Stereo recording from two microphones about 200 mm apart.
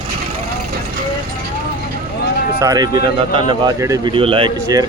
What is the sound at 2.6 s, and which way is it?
Speech, 20° right (ahead or behind).